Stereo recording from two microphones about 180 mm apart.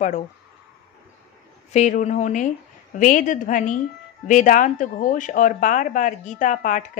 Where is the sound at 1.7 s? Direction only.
40° left (ahead or behind).